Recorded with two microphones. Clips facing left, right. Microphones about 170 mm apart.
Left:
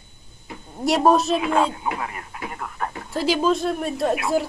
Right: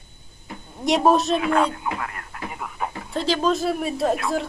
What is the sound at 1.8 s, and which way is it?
Speech, 15° left (ahead or behind).